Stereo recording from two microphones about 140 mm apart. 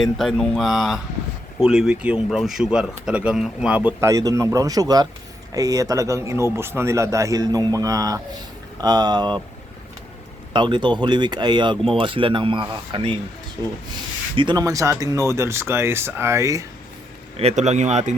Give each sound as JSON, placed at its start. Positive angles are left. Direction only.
{"t": 0.0, "sound": "speech", "side_deg": 0}
{"t": 4.0, "sound": "a man's voice", "side_deg": -25}
{"t": 10.5, "sound": "speech", "side_deg": -35}
{"t": 14.3, "sound": "a man's voice", "side_deg": -30}
{"t": 17.3, "sound": "speech", "side_deg": -50}